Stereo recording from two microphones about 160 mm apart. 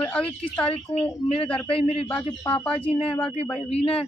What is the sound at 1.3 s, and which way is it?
Speech, 35° left (ahead or behind).